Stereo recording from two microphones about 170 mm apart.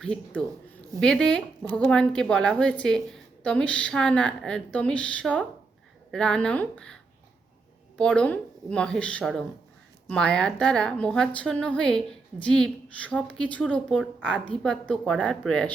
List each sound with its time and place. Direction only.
0.0 s a woman's voice: 5° left (ahead or behind)